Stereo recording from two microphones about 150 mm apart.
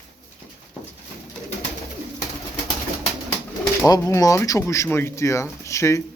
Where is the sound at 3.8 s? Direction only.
20° left (ahead or behind).